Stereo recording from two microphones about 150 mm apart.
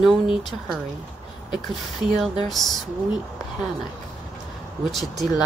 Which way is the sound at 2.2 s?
Centre (ahead or behind).